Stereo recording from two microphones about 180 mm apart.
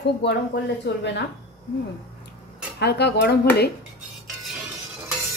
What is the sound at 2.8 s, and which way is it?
Speech, 65° left (ahead or behind).